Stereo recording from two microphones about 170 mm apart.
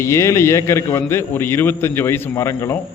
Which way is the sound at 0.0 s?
15° left (ahead or behind).